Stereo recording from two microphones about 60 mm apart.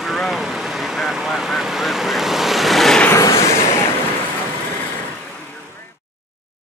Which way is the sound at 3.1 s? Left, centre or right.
Left.